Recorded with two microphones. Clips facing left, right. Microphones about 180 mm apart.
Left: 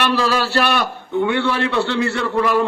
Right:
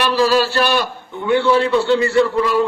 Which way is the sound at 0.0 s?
60° left (ahead or behind).